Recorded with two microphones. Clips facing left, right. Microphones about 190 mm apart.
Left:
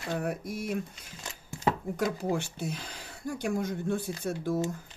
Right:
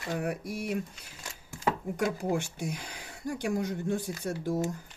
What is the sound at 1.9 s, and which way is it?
Speech, 15° right (ahead or behind).